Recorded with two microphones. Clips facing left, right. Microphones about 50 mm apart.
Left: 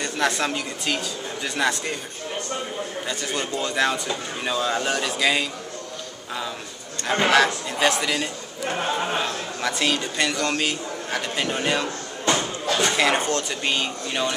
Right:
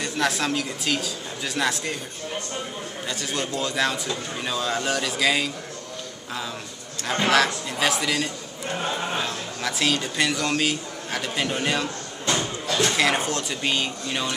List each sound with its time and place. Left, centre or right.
0.0 s speech: centre
3.1 s speech: centre
7.2 s speech: centre
8.9 s speech: centre
9.2 s speech: centre
12.3 s speech: centre